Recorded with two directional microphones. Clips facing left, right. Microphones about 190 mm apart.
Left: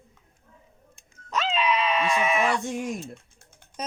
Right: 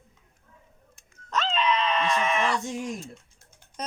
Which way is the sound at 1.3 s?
10° left (ahead or behind).